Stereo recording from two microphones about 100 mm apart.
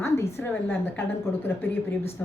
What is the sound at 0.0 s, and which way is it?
A woman's voice, 25° left (ahead or behind).